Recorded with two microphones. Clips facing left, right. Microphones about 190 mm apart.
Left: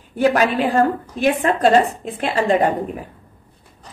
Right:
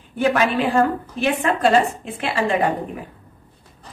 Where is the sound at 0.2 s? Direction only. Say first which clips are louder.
Left 2 dB; 40° left (ahead or behind).